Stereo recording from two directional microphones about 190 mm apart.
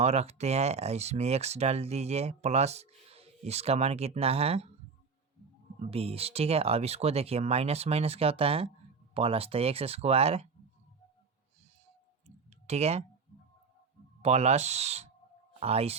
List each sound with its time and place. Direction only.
0.0 s speech: 35° right (ahead or behind)
5.9 s speech: 30° right (ahead or behind)
12.6 s speech: 35° right (ahead or behind)
14.2 s speech: 35° right (ahead or behind)